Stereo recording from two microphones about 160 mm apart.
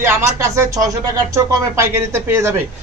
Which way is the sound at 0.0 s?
15° right (ahead or behind).